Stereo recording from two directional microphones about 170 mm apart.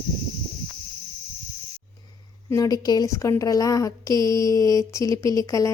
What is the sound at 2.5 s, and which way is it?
A woman's voice, 20° left (ahead or behind).